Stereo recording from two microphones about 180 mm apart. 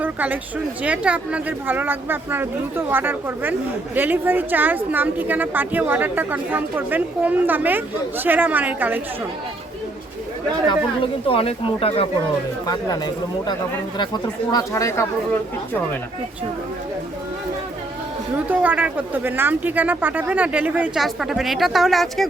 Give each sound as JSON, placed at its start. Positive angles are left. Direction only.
{"t": 0.0, "sound": "a sound", "side_deg": -10}
{"t": 0.8, "sound": "speech", "side_deg": -10}
{"t": 10.7, "sound": "speech", "side_deg": 30}
{"t": 14.5, "sound": "speech", "side_deg": 15}
{"t": 18.4, "sound": "speech", "side_deg": -10}